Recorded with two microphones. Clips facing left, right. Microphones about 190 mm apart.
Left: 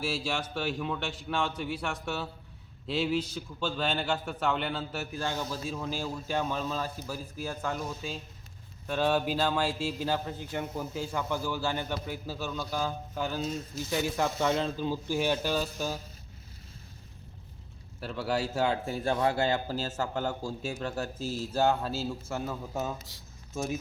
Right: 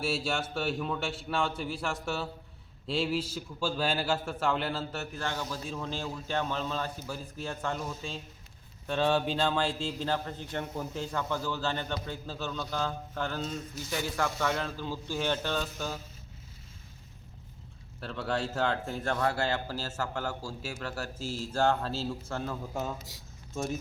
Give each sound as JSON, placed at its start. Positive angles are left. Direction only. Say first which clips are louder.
{"t": 0.3, "sound": "a man's voice", "louder": "right 1 dB", "side_deg": -5}
{"t": 5.1, "sound": "speech", "louder": "left 3 dB", "side_deg": 10}
{"t": 13.9, "sound": "speech", "louder": "left 3 dB", "side_deg": 20}
{"t": 18.0, "sound": "a man's voice", "louder": "left 2 dB", "side_deg": 5}